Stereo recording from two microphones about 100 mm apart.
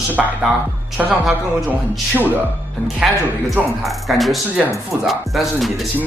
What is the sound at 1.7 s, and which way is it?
Speech, 20° right (ahead or behind).